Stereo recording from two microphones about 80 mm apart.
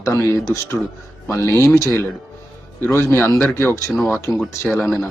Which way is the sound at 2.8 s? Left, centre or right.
Left.